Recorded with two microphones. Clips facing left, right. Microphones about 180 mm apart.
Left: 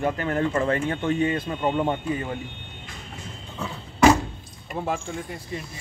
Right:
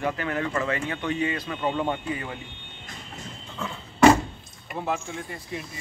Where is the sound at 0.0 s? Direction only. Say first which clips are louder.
Left 3 dB; 45° left (ahead or behind).